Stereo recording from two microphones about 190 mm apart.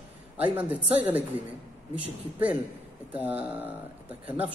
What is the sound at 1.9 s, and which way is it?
Speech, 10° right (ahead or behind).